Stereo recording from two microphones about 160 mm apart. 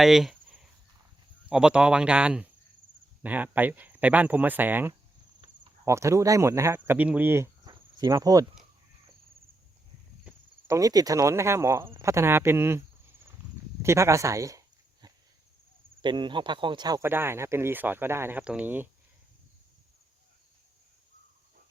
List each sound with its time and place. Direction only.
0.0 s speech: centre (ahead or behind)
1.5 s speech: 5° right (ahead or behind)
7.7 s a sound: 25° right (ahead or behind)
10.2 s speech: 20° right (ahead or behind)
13.8 s speech: 20° right (ahead or behind)
16.0 s speech: 30° right (ahead or behind)
17.0 s speech: 15° right (ahead or behind)